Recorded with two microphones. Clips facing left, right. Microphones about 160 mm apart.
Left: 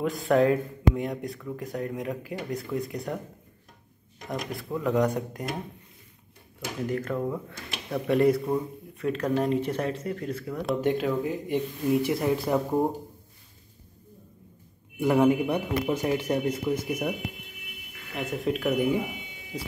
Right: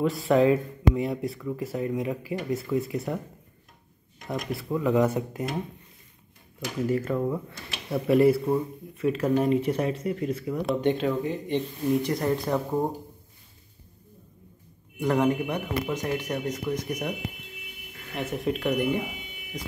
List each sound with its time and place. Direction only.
0.0 s speech: centre (ahead or behind)
4.3 s speech: 5° right (ahead or behind)
6.9 s speech: 5° right (ahead or behind)
15.0 s speech: 10° left (ahead or behind)
18.1 s speech: centre (ahead or behind)